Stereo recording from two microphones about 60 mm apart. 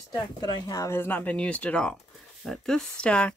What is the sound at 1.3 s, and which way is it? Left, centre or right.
Speech, left.